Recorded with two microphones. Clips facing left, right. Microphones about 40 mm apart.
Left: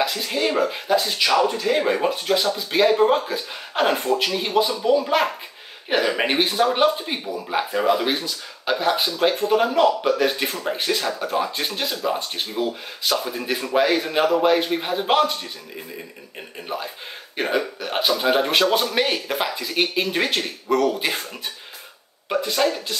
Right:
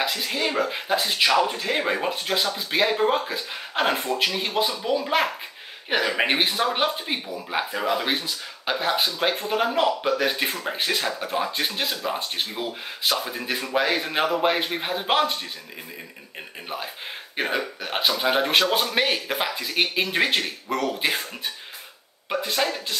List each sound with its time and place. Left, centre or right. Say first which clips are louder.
0.1 s a man's voice: left 3 dB; centre
16.6 s a man's voice: left 3 dB; centre
22.3 s a man's voice: left 4 dB; centre